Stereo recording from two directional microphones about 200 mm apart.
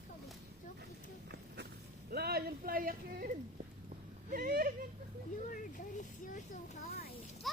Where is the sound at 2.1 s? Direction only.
50° right (ahead or behind).